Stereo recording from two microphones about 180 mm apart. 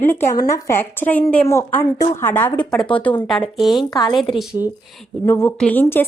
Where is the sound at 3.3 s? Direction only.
Centre (ahead or behind).